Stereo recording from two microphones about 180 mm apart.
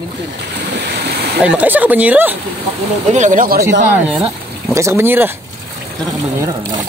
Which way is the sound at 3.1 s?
45° right (ahead or behind).